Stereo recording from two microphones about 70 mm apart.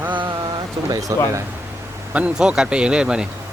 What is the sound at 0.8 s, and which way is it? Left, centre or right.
Speech, right.